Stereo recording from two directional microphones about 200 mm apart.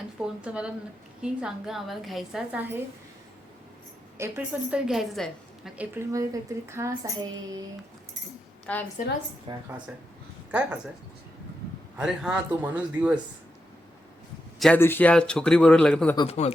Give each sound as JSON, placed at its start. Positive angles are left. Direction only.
{"t": 0.4, "sound": "a woman's voice", "side_deg": -5}
{"t": 4.2, "sound": "a woman's voice", "side_deg": -10}
{"t": 8.6, "sound": "a woman's voice", "side_deg": 5}
{"t": 9.5, "sound": "speech", "side_deg": -25}
{"t": 10.5, "sound": "a woman's voice", "side_deg": -5}
{"t": 11.9, "sound": "a woman's voice", "side_deg": -5}
{"t": 14.6, "sound": "a woman's voice", "side_deg": 10}
{"t": 16.1, "sound": "speech", "side_deg": 30}